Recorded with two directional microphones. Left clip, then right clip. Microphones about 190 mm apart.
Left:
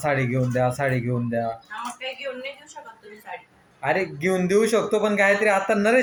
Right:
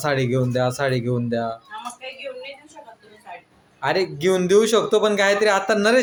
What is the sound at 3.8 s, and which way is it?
Speech, 20° right (ahead or behind).